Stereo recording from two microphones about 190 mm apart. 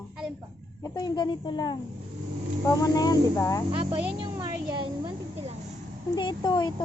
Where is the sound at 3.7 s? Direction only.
30° right (ahead or behind).